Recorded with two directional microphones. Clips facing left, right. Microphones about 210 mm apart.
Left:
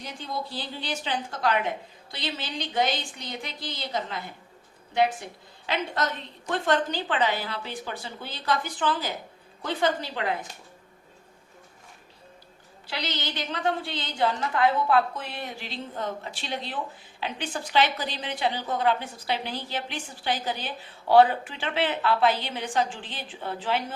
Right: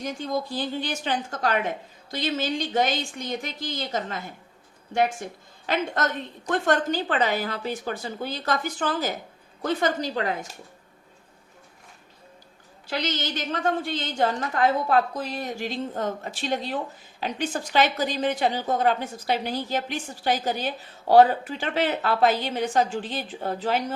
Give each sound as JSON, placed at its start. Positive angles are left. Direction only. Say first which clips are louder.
{"t": 0.0, "sound": "a woman's voice", "louder": "right 6 dB", "side_deg": -45}
{"t": 12.9, "sound": "a woman's voice", "louder": "right 5 dB", "side_deg": -45}